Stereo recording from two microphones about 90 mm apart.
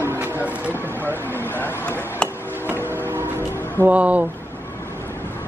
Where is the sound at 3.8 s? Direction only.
15° right (ahead or behind).